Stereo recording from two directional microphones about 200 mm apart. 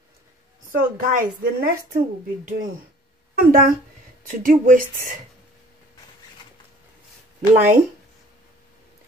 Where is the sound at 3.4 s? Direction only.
45° right (ahead or behind).